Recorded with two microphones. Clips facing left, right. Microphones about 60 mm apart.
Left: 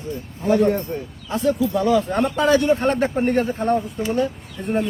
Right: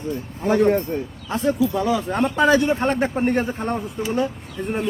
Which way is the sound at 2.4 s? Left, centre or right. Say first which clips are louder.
Even; right.